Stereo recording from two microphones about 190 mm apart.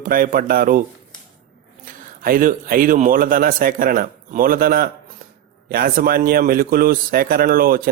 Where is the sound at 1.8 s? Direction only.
45° right (ahead or behind).